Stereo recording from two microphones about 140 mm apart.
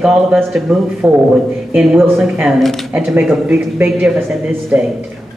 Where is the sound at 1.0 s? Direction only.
15° right (ahead or behind).